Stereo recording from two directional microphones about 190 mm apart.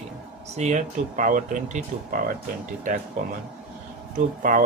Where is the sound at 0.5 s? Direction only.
40° right (ahead or behind).